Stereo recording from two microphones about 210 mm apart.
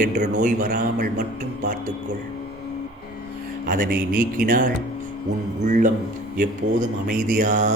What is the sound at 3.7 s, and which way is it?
A man's voice, 40° right (ahead or behind).